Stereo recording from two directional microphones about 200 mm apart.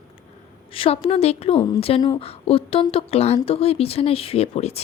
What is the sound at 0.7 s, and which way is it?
A woman's voice, 30° left (ahead or behind).